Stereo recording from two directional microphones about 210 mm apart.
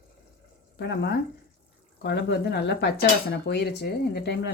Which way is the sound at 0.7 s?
55° left (ahead or behind).